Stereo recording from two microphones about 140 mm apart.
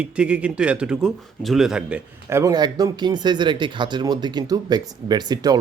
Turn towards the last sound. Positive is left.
turn(degrees=-30)  # may be behind; listen again after turning